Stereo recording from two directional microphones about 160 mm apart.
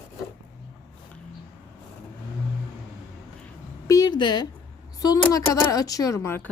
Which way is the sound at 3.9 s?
25° left (ahead or behind).